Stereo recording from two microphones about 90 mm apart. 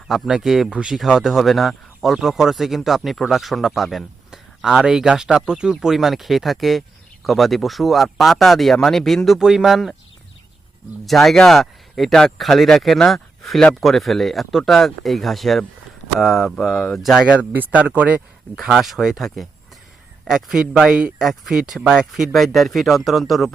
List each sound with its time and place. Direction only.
0.1 s speech: 5° right (ahead or behind)
11.0 s speech: centre (ahead or behind)
17.3 s speech: 20° right (ahead or behind)
18.5 s speech: 5° right (ahead or behind)